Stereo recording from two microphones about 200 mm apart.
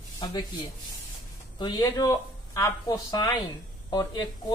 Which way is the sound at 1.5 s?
20° left (ahead or behind).